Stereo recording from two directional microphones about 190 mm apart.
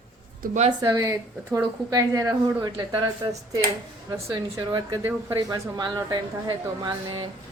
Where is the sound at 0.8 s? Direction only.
15° right (ahead or behind).